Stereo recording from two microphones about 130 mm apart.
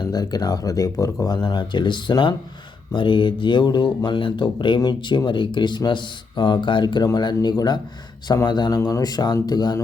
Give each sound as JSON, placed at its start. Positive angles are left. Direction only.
{"t": 0.0, "sound": "speech", "side_deg": 30}